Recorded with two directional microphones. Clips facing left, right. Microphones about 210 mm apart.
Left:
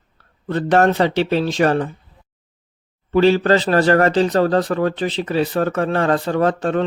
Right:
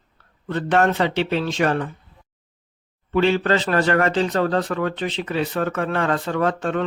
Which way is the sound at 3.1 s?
35° left (ahead or behind).